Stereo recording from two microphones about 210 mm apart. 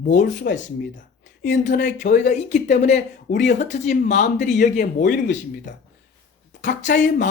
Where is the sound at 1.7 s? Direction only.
35° left (ahead or behind).